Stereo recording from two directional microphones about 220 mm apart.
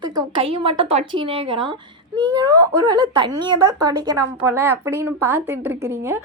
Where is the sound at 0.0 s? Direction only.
20° right (ahead or behind).